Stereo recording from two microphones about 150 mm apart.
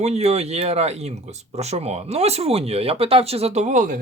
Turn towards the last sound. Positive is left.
turn(degrees=-55)  # may be behind; listen again after turning